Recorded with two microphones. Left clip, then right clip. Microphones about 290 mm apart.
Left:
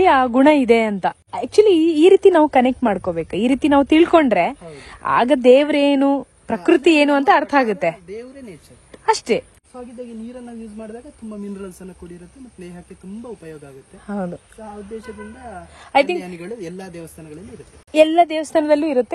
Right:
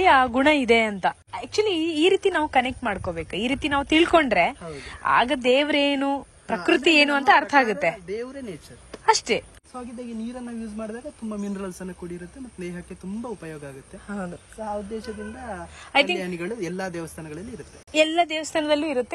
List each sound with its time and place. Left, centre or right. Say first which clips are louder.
0.0 s speech: left 4 dB; centre
1.3 s a woman's voice: left 10 dB; centre
9.0 s speech: left 3 dB; centre
14.0 s a woman's voice: left 7 dB; centre
15.9 s a woman's voice: left 5 dB; centre
16.2 s speech: even; centre
17.9 s a woman's voice: left 7 dB; centre
18.5 s a woman's voice: left 7 dB; left